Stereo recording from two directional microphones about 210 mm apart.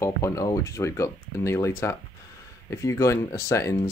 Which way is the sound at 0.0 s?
15° left (ahead or behind).